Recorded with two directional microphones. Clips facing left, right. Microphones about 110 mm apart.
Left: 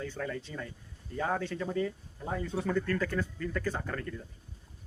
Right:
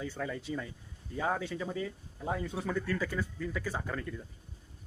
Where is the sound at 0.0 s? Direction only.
5° right (ahead or behind).